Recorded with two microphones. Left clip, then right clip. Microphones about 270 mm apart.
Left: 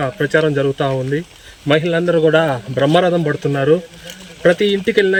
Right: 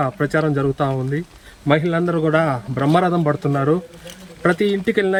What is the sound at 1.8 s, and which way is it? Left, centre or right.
Speech, centre.